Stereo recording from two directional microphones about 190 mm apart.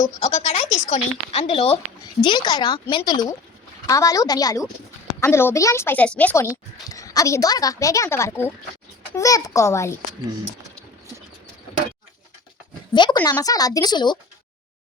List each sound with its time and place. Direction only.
0.2 s speech: 35° left (ahead or behind); by 10.0 s 15° left (ahead or behind)
12.9 s speech: 25° left (ahead or behind)